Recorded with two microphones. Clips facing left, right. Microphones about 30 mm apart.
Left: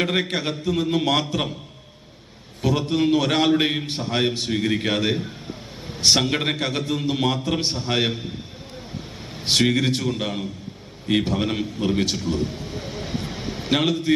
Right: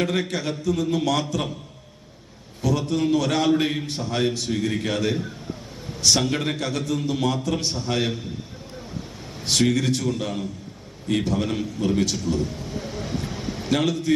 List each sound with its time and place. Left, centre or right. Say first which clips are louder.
0.0 s a man's voice: left 2 dB; left
2.6 s a man's voice: left 2 dB; left
9.4 s a man's voice: left 2 dB; left